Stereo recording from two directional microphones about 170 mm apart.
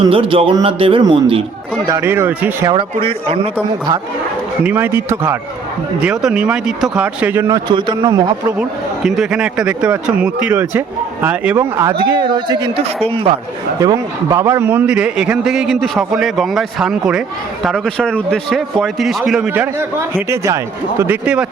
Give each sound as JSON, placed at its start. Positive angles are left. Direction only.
{"t": 0.1, "sound": "speech", "side_deg": -30}
{"t": 1.9, "sound": "speech", "side_deg": -15}
{"t": 2.7, "sound": "speech", "side_deg": -35}
{"t": 4.6, "sound": "speech", "side_deg": -10}
{"t": 8.1, "sound": "speech", "side_deg": -15}
{"t": 9.0, "sound": "speech", "side_deg": -5}
{"t": 12.2, "sound": "speech", "side_deg": -25}
{"t": 13.7, "sound": "a man's voice", "side_deg": -20}